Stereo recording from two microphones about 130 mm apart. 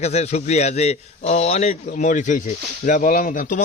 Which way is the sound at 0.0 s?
55° left (ahead or behind).